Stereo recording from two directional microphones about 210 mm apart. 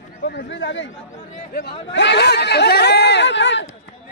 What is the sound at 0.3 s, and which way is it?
Speech, 55° left (ahead or behind).